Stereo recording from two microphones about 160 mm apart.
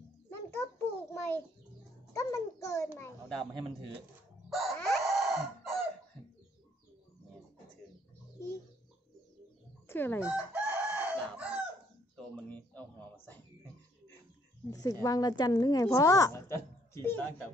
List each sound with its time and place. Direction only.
0.3 s a sound: 15° left (ahead or behind)
2.1 s a woman's voice: 20° left (ahead or behind)
3.0 s a child's voice: 5° left (ahead or behind)
4.5 s chicken: centre (ahead or behind)
9.8 s speech: 15° left (ahead or behind)
10.2 s chicken: 10° right (ahead or behind)
12.4 s a sound: 10° left (ahead or behind)
14.7 s a woman's voice: 20° left (ahead or behind)